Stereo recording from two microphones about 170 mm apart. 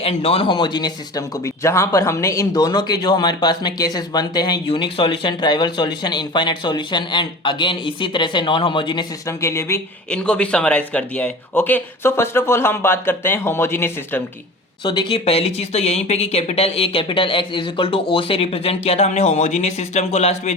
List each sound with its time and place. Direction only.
0.0 s speech: 35° left (ahead or behind); by 9.8 s 15° left (ahead or behind)
10.1 s speech: 5° left (ahead or behind)
14.8 s speech: 30° left (ahead or behind)